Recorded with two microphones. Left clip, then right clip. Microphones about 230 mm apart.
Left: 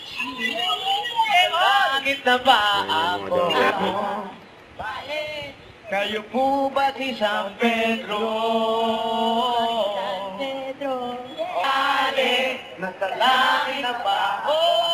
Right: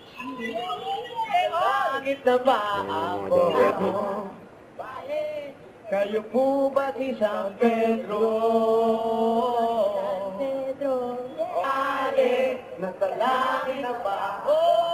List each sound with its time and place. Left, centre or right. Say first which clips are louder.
1.1 s a sound: left 5 dB; centre
5.9 s a man's voice: even; centre
6.7 s mantra: left 3 dB; centre
11.5 s chant: left 5 dB; centre